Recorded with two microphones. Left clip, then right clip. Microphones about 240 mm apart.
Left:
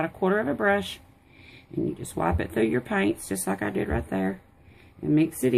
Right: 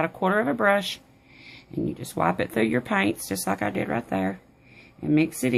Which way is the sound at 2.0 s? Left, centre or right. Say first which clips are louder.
Right 6 dB; right.